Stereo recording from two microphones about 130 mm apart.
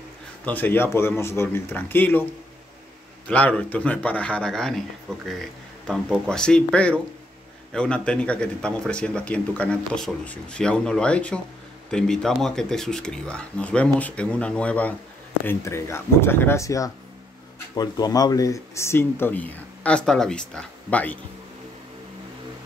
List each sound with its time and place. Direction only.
0.5 s a man's voice: 15° left (ahead or behind)
3.3 s a man's voice: 10° left (ahead or behind)
15.4 s a man's voice: 20° left (ahead or behind)